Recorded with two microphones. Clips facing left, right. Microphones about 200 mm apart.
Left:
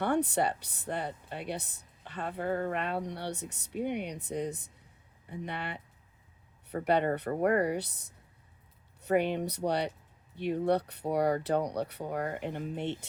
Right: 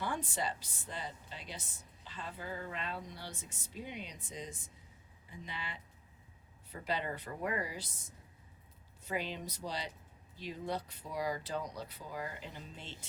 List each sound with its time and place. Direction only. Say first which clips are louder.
0.0 s a woman's voice: left 10 dB; 65° left (ahead or behind)